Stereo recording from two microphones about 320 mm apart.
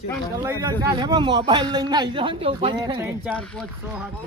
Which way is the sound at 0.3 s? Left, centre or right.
Centre.